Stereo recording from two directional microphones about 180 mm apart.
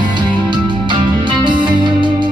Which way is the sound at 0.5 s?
25° right (ahead or behind).